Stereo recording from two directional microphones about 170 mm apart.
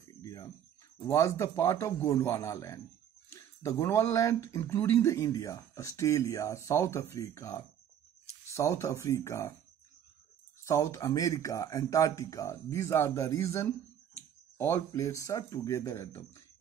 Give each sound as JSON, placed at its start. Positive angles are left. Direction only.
{"t": 0.1, "sound": "a sound", "side_deg": 20}
{"t": 1.0, "sound": "speech", "side_deg": 15}
{"t": 10.6, "sound": "speech", "side_deg": 20}